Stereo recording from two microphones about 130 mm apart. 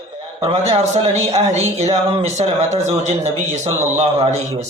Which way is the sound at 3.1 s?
60° right (ahead or behind).